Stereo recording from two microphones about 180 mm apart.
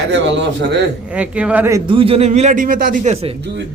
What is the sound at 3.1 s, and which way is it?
Speech, 30° right (ahead or behind).